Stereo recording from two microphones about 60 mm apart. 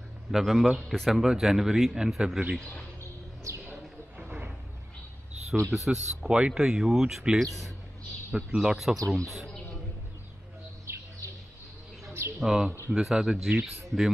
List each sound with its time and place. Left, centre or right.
0.3 s a man's voice: centre
3.6 s a sound: right
5.7 s speech: centre
8.5 s a man's voice: centre
10.9 s bird: right
12.1 s bird: right
12.4 s speech: centre